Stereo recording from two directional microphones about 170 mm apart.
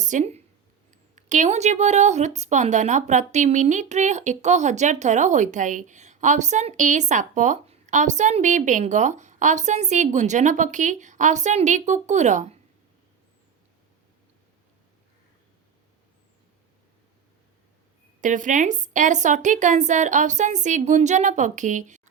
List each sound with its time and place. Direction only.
0.0 s a woman's voice: 45° right (ahead or behind)
18.2 s a woman's voice: 50° right (ahead or behind)